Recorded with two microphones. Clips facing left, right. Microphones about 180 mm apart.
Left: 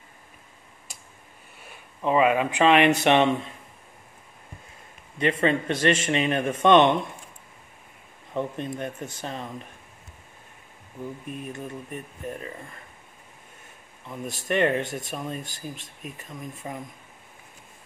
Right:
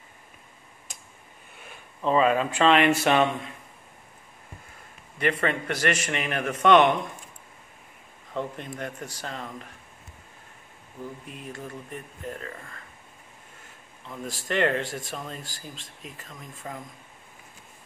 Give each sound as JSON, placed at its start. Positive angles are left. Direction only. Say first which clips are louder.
{"t": 2.0, "sound": "speech", "louder": "left 1 dB", "side_deg": 15}
{"t": 5.2, "sound": "speech", "louder": "left 3 dB", "side_deg": 25}
{"t": 8.3, "sound": "speech", "louder": "left 3 dB", "side_deg": 20}
{"t": 11.4, "sound": "speech", "louder": "left 3 dB", "side_deg": 20}
{"t": 14.0, "sound": "speech", "louder": "left 3 dB", "side_deg": 20}